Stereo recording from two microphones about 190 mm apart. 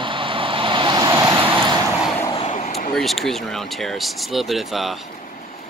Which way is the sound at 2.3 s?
35° left (ahead or behind).